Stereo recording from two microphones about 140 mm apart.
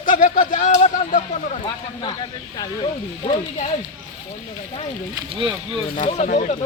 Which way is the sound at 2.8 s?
45° left (ahead or behind).